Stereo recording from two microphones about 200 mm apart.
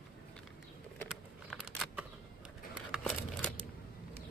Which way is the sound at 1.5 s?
Centre (ahead or behind).